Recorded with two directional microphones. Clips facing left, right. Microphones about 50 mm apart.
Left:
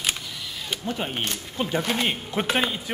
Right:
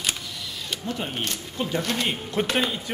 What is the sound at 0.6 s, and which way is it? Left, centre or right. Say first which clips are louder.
Speech: left 2 dB; centre.